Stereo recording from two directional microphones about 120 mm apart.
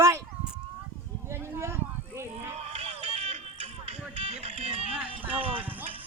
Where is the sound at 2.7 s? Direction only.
55° right (ahead or behind).